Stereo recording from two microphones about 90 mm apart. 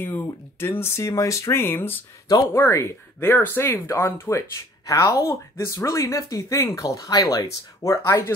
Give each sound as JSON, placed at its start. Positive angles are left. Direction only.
{"t": 0.0, "sound": "speech", "side_deg": 25}
{"t": 2.2, "sound": "speech", "side_deg": 45}
{"t": 2.6, "sound": "speech", "side_deg": 30}